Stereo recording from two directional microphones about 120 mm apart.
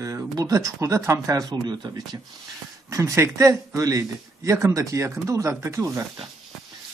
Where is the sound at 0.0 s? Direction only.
30° right (ahead or behind).